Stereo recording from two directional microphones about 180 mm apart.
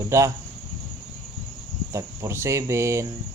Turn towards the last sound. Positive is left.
turn(degrees=-15)  # may be behind; listen again after turning